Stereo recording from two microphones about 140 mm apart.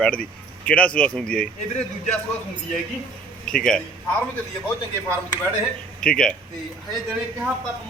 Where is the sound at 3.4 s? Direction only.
5° left (ahead or behind).